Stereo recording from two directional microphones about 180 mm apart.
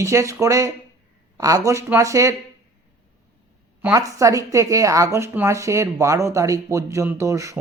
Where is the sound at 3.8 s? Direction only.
15° right (ahead or behind).